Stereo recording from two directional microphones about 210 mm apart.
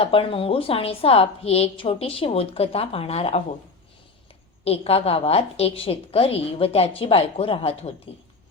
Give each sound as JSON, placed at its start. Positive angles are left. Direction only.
{"t": 0.0, "sound": "a woman's voice", "side_deg": 25}
{"t": 4.6, "sound": "a woman's voice", "side_deg": 30}